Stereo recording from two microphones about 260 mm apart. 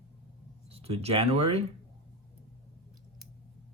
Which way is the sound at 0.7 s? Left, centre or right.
Right.